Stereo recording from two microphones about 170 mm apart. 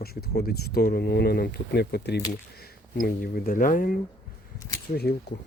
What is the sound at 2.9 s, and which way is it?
Speech, 55° left (ahead or behind).